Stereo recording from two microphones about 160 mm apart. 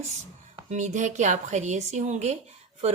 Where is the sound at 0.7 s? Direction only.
50° right (ahead or behind).